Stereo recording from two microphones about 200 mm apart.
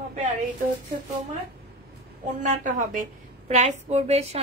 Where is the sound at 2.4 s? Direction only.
40° right (ahead or behind).